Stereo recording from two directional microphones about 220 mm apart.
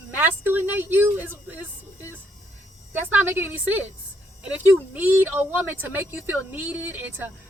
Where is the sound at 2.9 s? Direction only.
10° right (ahead or behind).